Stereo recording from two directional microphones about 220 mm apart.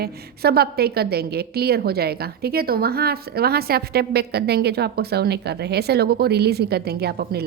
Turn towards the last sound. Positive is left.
turn(degrees=-45)  # may be behind; listen again after turning